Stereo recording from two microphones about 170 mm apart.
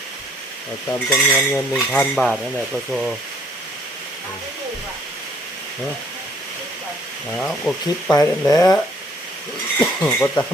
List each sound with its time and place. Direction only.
0.9 s cutlery: 5° left (ahead or behind)
7.3 s cutlery: 5° left (ahead or behind)
8.1 s speech: 20° left (ahead or behind)
9.8 s speech: 15° left (ahead or behind)